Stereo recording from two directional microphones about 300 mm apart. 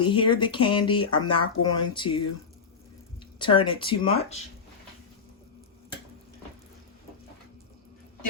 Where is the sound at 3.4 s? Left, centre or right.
Centre.